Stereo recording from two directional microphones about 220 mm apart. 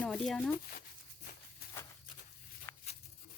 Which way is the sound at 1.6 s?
45° left (ahead or behind).